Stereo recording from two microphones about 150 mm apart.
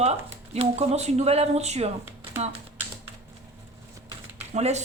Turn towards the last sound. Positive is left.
turn(degrees=-45)  # may be behind; listen again after turning